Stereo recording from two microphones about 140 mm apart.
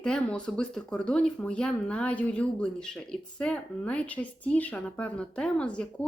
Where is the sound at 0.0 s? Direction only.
5° left (ahead or behind).